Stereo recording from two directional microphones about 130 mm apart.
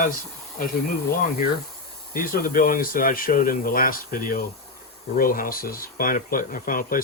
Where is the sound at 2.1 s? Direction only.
90° left.